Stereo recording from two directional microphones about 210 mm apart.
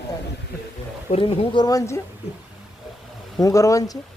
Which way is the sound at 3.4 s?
15° left (ahead or behind).